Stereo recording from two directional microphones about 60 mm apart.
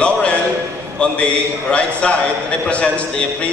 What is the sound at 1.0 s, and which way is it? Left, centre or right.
A man's voice, centre.